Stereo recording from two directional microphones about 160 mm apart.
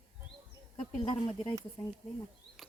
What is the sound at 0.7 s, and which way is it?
Speech, 35° left (ahead or behind).